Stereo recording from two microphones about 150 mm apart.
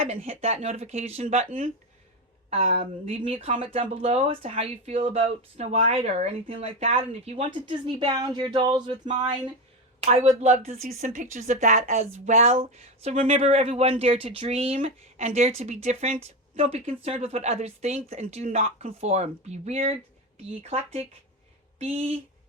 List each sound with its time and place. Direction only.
0.0 s speech: 40° right (ahead or behind)
2.5 s speech: 40° right (ahead or behind)
10.0 s speech: 45° right (ahead or behind)